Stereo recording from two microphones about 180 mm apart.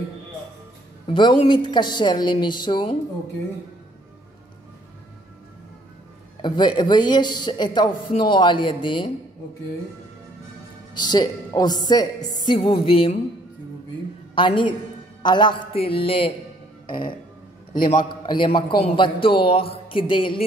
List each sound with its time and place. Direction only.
1.1 s a man's voice: 25° left (ahead or behind)
6.4 s a man's voice: 25° left (ahead or behind)
11.0 s a man's voice: 25° left (ahead or behind)
14.3 s a woman's voice: 30° left (ahead or behind)
16.8 s music: 25° left (ahead or behind)
17.7 s a man's voice: 55° left (ahead or behind)
18.0 s a man's voice: 25° left (ahead or behind)